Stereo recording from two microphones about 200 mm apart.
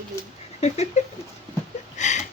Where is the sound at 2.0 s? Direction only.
35° left (ahead or behind).